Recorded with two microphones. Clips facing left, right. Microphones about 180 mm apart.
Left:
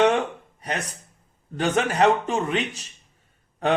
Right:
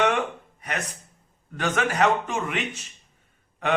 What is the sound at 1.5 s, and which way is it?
A man's voice, 30° left (ahead or behind).